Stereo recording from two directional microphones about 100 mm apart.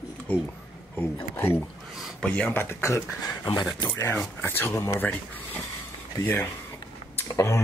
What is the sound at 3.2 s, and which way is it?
Speech, 40° left (ahead or behind).